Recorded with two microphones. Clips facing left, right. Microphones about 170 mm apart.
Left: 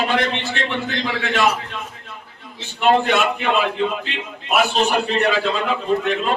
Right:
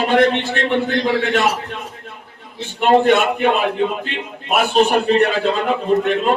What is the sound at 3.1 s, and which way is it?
A man's voice, 50° right (ahead or behind).